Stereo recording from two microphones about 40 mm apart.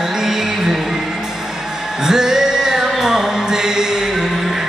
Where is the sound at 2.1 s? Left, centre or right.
Centre.